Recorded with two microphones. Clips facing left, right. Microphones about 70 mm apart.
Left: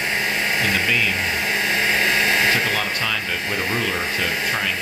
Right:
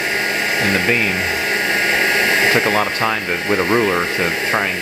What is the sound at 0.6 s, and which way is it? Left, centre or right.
Speech, right.